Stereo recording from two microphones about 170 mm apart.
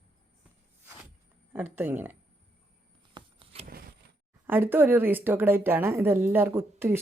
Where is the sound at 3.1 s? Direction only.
30° right (ahead or behind).